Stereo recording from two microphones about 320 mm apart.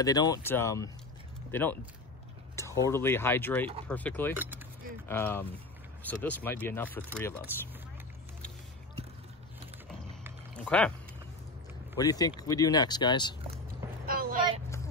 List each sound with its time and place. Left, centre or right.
0.0 s speech: centre
9.8 s rowboat: centre
12.0 s speech: centre
14.0 s a sound: right